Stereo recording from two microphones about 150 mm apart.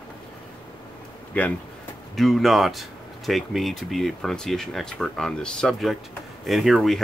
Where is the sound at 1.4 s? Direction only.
10° left (ahead or behind).